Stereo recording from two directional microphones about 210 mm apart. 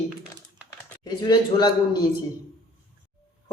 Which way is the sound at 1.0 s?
20° left (ahead or behind).